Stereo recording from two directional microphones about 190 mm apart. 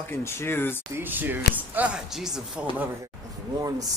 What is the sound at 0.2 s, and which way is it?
Speech, 15° left (ahead or behind).